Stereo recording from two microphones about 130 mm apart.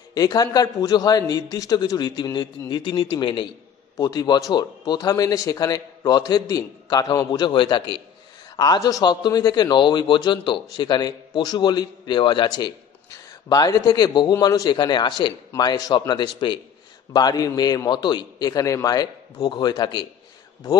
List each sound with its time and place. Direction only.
0.1 s a man's voice: 30° left (ahead or behind)
3.9 s a man's voice: 30° left (ahead or behind)